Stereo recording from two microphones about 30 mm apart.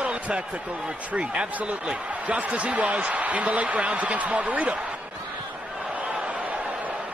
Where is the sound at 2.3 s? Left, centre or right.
Right.